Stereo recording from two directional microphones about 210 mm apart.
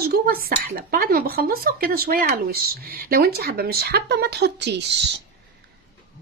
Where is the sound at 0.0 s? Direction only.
45° right (ahead or behind).